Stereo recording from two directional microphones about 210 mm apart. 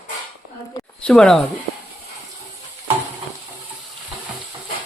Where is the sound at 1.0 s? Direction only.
5° left (ahead or behind).